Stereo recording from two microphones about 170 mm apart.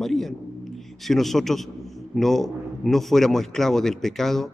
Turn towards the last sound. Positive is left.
turn(degrees=0)  # may be behind; listen again after turning